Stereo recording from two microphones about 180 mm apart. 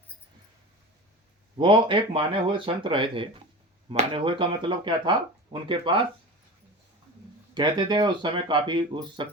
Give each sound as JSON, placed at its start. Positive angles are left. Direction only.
{"t": 1.5, "sound": "speech", "side_deg": -25}
{"t": 7.5, "sound": "speech", "side_deg": -25}